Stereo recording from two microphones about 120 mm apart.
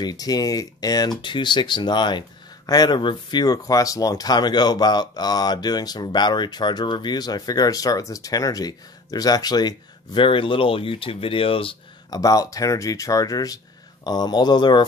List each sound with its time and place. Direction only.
0.0 s speech: 30° left (ahead or behind); by 11.7 s 50° left (ahead or behind)
12.1 s speech: 30° left (ahead or behind)